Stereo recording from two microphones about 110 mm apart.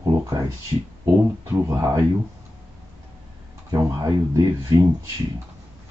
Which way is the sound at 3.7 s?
30° right (ahead or behind).